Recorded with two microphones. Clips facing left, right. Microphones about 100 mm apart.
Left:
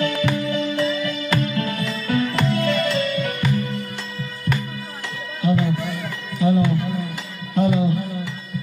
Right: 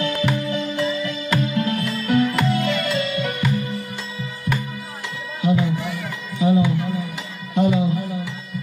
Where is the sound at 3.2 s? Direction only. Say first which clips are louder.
Even; 15° right (ahead or behind).